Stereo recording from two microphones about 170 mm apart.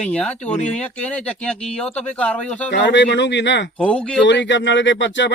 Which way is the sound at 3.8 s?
5° left (ahead or behind).